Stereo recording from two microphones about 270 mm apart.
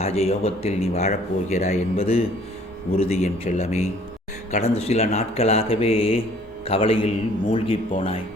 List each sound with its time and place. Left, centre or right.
0.0 s speech: left